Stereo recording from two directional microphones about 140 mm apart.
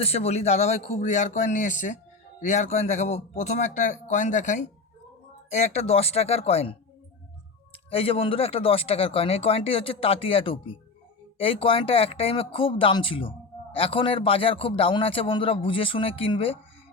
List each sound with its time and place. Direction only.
0.0 s speech: 50° left (ahead or behind); by 2.0 s 65° left (ahead or behind)
2.5 s speech: 55° left (ahead or behind)
7.9 s a man's voice: 45° left (ahead or behind)